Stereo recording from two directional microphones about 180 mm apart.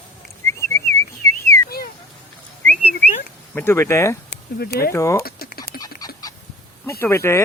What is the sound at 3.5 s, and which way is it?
Speech, 10° left (ahead or behind).